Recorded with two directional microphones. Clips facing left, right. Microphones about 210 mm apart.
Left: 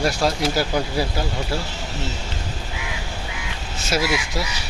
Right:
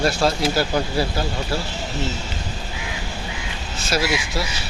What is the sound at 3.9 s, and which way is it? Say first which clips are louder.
Speech: even; 20° left (ahead or behind).